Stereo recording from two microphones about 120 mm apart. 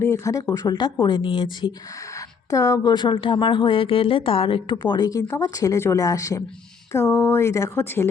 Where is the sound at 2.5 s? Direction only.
30° left (ahead or behind).